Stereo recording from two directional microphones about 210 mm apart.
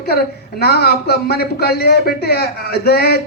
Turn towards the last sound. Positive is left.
turn(degrees=50)  # may be behind; listen again after turning